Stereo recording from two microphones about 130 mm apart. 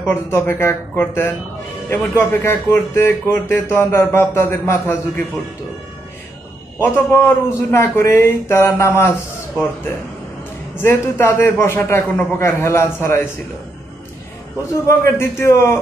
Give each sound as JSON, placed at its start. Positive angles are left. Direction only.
{"t": 0.1, "sound": "speech", "side_deg": 20}
{"t": 6.8, "sound": "speech", "side_deg": 15}
{"t": 10.8, "sound": "speech", "side_deg": 20}
{"t": 14.7, "sound": "speech", "side_deg": 20}